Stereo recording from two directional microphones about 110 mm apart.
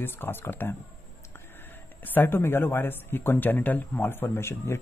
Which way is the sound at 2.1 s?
20° left (ahead or behind).